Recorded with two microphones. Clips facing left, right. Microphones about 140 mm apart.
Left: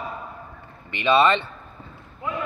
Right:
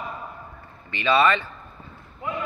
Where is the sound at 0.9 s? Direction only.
20° left (ahead or behind).